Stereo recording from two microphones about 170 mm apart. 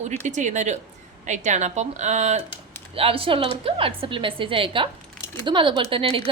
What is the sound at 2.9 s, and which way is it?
Speech, 35° right (ahead or behind).